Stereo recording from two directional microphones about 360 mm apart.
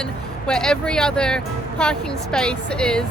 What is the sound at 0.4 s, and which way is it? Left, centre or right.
Speech, centre.